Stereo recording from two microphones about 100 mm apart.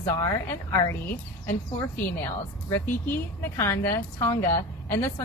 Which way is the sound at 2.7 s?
20° left (ahead or behind).